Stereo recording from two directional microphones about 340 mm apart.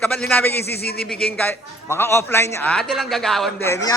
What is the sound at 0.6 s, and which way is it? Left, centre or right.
Speech, left.